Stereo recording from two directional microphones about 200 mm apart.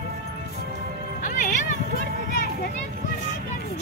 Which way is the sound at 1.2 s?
40° left (ahead or behind).